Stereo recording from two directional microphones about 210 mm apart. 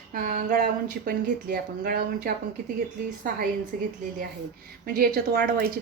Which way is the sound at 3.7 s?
40° right (ahead or behind).